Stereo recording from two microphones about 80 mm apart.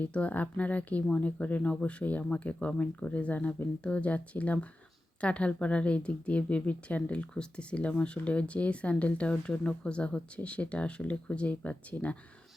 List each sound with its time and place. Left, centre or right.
0.0 s speech: centre